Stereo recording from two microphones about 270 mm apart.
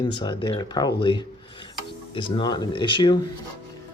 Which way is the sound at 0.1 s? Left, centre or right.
Centre.